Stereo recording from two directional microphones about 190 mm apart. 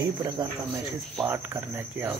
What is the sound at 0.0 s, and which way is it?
Speech, 20° right (ahead or behind).